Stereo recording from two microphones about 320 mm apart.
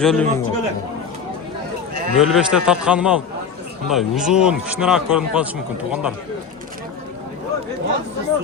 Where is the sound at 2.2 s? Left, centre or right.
Centre.